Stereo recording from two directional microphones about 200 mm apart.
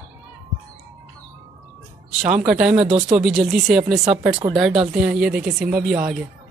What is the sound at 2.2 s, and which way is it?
Speech, 40° right (ahead or behind).